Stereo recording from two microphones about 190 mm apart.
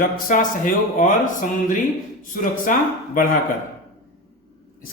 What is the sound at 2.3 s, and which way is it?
Speech, 45° left (ahead or behind).